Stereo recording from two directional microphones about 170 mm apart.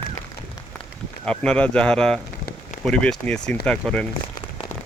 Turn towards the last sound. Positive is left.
turn(degrees=5)  # may be behind; listen again after turning